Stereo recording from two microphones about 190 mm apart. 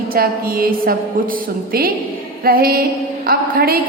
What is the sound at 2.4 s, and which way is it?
A woman's voice, 50° right (ahead or behind).